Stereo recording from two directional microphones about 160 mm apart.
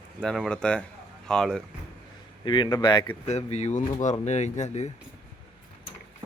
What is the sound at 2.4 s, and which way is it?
Speech, 30° left (ahead or behind).